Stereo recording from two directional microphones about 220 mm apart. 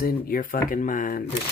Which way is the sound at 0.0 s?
40° left (ahead or behind).